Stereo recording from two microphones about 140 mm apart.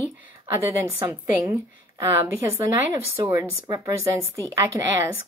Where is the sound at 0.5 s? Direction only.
15° right (ahead or behind).